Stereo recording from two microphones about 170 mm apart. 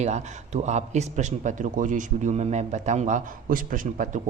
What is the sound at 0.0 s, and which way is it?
A man's voice, 45° right (ahead or behind).